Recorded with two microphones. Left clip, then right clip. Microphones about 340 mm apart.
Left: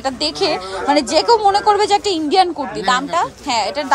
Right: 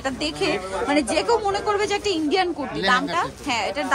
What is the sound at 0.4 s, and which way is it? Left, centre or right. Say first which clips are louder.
A woman's voice: left 5 dB; centre.